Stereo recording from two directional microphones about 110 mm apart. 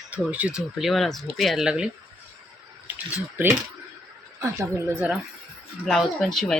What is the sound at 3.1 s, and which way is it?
Speech, 20° right (ahead or behind).